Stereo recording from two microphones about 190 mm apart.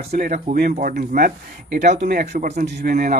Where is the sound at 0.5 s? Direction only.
50° right (ahead or behind).